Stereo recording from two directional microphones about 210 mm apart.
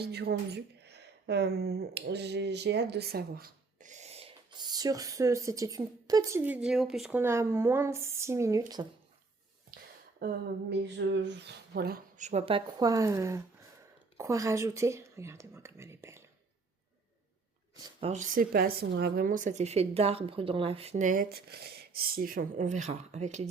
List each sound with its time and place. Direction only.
0.0 s speech: 50° right (ahead or behind); by 8.9 s 15° right (ahead or behind)
9.7 s a sound: 45° right (ahead or behind); by 13.4 s 15° right (ahead or behind)
14.2 s speech: 15° right (ahead or behind)
17.8 s speech: 30° right (ahead or behind)